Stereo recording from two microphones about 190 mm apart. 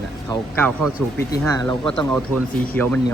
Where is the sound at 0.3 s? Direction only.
10° left (ahead or behind).